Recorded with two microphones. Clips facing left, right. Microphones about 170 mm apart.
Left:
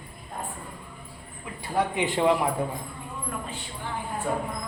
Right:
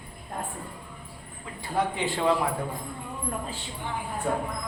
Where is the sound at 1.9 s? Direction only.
15° left (ahead or behind).